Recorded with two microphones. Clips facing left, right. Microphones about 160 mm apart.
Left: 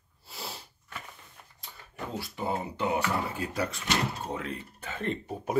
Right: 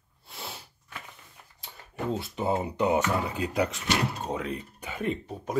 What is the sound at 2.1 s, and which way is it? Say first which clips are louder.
Speech: right 4 dB; 20° right (ahead or behind).